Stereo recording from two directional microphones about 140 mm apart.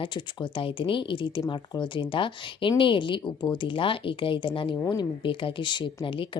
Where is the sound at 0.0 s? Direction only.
35° left (ahead or behind).